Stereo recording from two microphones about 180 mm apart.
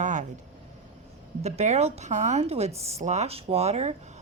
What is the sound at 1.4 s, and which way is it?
A woman's voice, 40° right (ahead or behind).